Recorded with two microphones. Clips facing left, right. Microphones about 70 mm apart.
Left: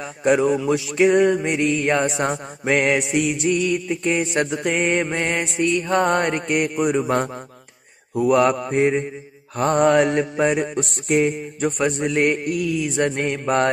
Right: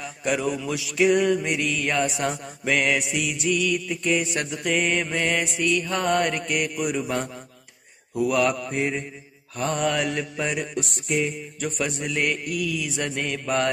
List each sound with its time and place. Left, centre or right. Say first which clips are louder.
0.0 s mantra: left 7 dB; left